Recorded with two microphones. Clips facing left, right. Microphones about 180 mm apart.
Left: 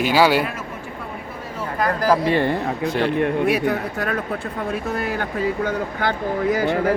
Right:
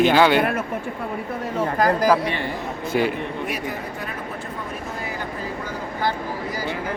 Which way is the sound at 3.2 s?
70° left (ahead or behind).